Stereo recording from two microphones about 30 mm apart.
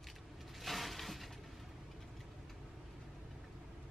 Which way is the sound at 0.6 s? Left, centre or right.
Centre.